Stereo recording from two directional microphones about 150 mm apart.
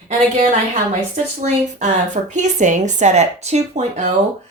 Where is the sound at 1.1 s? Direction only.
50° right (ahead or behind).